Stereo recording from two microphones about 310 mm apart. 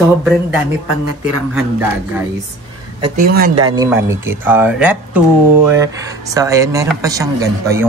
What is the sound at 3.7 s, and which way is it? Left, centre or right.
A man's voice, centre.